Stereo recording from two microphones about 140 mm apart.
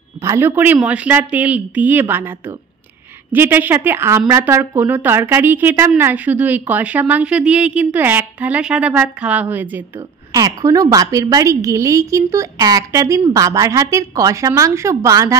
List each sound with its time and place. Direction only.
0.2 s a woman's voice: 20° right (ahead or behind)
9.9 s a woman's voice: 25° right (ahead or behind)